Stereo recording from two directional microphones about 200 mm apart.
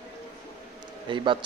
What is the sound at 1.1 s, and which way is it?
Speech, 25° right (ahead or behind).